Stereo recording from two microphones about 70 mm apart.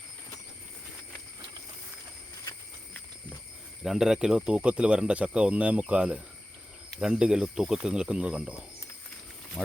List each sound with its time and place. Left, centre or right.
3.8 s speech: centre
9.6 s speech: centre